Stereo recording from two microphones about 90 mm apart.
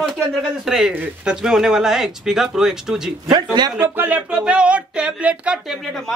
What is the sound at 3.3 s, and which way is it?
Speech, 55° right (ahead or behind).